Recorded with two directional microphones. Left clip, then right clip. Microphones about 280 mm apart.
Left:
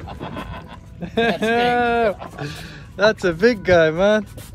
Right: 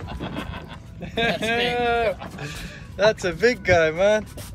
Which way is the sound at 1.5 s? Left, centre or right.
Centre.